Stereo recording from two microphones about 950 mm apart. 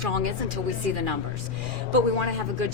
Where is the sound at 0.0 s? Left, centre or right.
Right.